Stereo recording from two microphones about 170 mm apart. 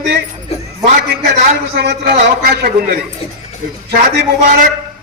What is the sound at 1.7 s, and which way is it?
Speech, 70° right (ahead or behind).